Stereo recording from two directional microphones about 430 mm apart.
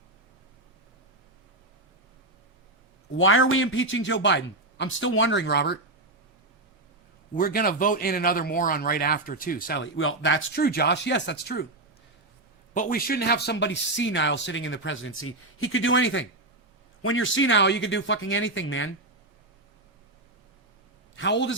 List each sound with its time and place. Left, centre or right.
3.1 s speech: left
7.3 s speech: centre
12.7 s speech: centre
21.2 s speech: left